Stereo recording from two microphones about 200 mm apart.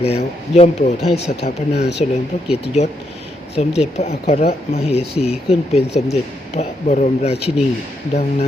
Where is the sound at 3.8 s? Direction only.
35° left (ahead or behind).